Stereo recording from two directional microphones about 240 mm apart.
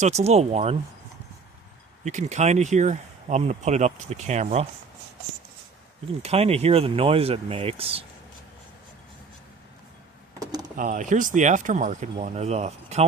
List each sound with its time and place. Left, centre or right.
0.0 s speech: right
2.0 s speech: right
6.2 s speech: right
10.4 s a sound: centre
10.8 s speech: right